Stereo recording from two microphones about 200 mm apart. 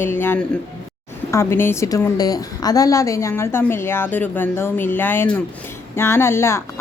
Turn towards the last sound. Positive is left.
turn(degrees=15)  # may be behind; listen again after turning